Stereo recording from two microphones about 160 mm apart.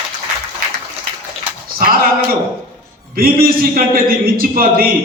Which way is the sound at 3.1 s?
65° right (ahead or behind).